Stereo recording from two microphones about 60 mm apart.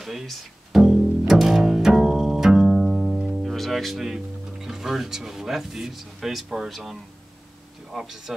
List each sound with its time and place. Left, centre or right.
0.0 s music: centre
3.5 s speech: centre